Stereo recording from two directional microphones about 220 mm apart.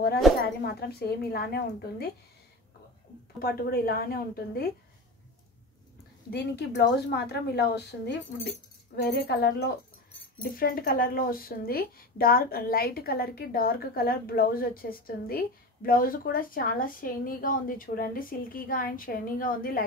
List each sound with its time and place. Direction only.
0.7 s a woman's voice: 45° left (ahead or behind)
3.3 s a woman's voice: 40° left (ahead or behind)
6.3 s a woman's voice: 50° left (ahead or behind)